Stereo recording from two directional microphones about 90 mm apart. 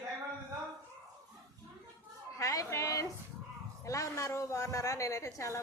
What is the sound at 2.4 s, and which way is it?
A woman's voice, 35° left (ahead or behind).